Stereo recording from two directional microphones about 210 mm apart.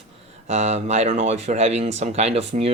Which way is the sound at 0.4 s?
30° right (ahead or behind).